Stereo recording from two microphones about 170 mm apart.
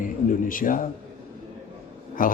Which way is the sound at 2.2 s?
55° left (ahead or behind).